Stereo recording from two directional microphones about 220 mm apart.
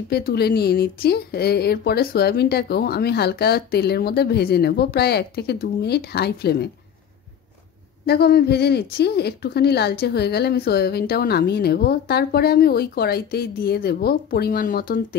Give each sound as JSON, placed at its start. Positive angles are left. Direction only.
{"t": 0.1, "sound": "speech", "side_deg": 45}
{"t": 8.1, "sound": "speech", "side_deg": 45}